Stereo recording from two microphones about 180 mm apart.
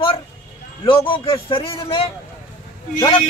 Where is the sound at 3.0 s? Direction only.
30° left (ahead or behind).